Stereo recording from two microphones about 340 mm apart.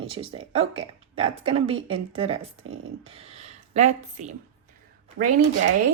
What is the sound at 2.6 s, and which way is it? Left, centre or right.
Speech, right.